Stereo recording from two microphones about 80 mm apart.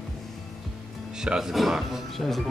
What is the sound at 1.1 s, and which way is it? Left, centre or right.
Speech, centre.